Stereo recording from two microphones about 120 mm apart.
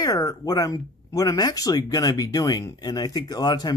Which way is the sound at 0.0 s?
30° left (ahead or behind).